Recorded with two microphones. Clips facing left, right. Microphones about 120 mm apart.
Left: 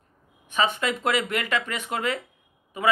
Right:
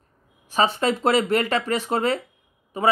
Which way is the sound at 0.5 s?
35° right (ahead or behind).